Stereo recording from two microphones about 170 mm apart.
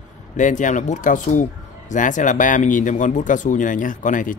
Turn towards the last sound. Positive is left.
turn(degrees=50)  # may be behind; listen again after turning